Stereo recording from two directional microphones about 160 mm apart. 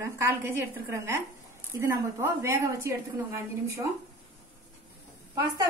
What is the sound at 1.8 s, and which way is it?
Speech, 15° right (ahead or behind).